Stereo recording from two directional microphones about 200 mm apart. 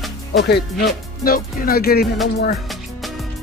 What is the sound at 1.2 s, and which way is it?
Music, 45° left (ahead or behind).